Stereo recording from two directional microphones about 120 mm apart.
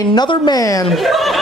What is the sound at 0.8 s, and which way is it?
Speech, centre (ahead or behind).